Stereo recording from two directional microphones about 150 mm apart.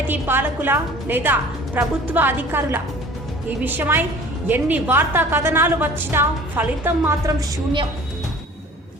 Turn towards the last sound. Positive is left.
turn(degrees=-35)  # may be behind; listen again after turning